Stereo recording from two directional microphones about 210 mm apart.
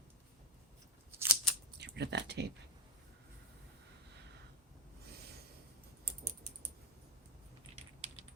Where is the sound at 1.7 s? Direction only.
55° right (ahead or behind).